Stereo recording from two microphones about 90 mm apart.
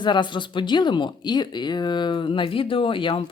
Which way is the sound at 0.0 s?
60° left (ahead or behind).